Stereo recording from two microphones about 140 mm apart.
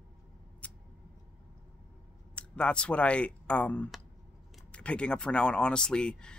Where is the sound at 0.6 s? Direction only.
10° left (ahead or behind).